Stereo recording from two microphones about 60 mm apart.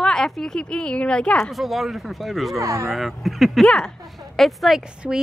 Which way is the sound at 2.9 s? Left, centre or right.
Centre.